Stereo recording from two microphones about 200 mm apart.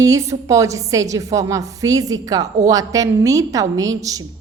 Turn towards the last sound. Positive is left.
turn(degrees=-15)  # may be behind; listen again after turning